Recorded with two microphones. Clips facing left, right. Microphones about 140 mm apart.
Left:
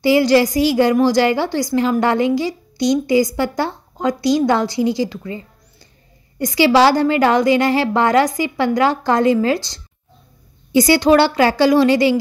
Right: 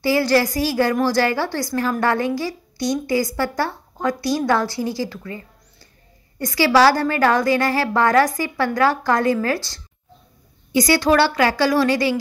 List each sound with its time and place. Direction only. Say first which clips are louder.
0.0 s a woman's voice: left 5 dB; 20° left (ahead or behind)